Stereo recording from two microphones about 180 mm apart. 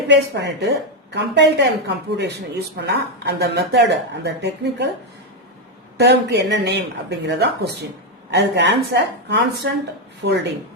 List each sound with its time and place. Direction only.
0.1 s speech: 70° right (ahead or behind)
6.0 s speech: 70° right (ahead or behind)